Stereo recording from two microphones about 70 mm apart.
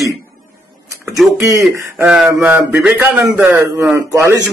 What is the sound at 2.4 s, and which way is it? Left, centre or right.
Speech, right.